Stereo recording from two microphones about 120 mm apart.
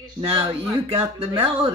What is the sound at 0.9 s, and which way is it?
Speech, 55° right (ahead or behind).